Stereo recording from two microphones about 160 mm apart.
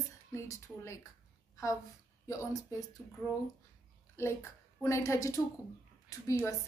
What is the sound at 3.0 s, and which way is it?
A woman's voice, 10° left (ahead or behind).